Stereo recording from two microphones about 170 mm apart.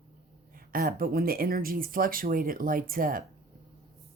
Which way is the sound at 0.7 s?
60° right (ahead or behind).